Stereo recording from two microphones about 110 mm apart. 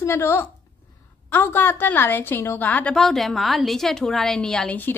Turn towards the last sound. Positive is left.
turn(degrees=5)  # may be behind; listen again after turning